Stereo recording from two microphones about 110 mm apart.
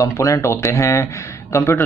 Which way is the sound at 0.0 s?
30° left (ahead or behind).